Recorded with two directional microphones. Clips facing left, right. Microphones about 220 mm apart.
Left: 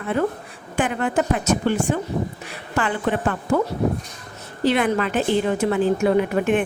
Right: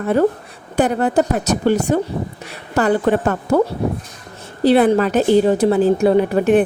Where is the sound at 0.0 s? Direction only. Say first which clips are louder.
Right 7 dB; 40° right (ahead or behind).